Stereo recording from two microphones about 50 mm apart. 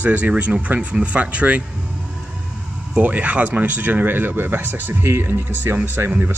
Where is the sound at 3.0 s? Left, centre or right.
Right.